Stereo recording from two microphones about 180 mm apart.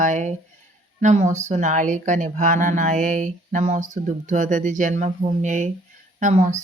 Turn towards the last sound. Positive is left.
turn(degrees=-40)  # may be behind; listen again after turning